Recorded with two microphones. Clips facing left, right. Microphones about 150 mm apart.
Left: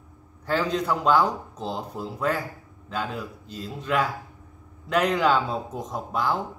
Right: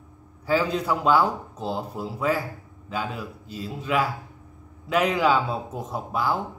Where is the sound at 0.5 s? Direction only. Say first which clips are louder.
Right 1 dB; 5° right (ahead or behind).